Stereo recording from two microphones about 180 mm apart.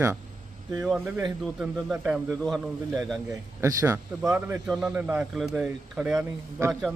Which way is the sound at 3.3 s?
15° right (ahead or behind).